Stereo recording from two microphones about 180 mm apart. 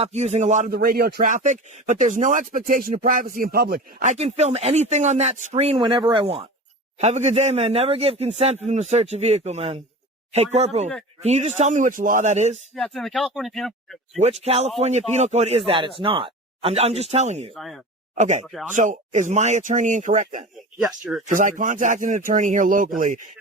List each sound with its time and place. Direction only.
0.0 s speech: 35° right (ahead or behind)
0.7 s speech: 60° right (ahead or behind)
4.1 s speech: 35° right (ahead or behind)
12.7 s speech: centre (ahead or behind)
14.2 s speech: 35° right (ahead or behind)
17.5 s speech: centre (ahead or behind)
18.1 s speech: 40° right (ahead or behind)
18.4 s speech: centre (ahead or behind)
18.7 s speech: 45° right (ahead or behind)
20.8 s speech: 5° right (ahead or behind)
21.2 s speech: 45° right (ahead or behind)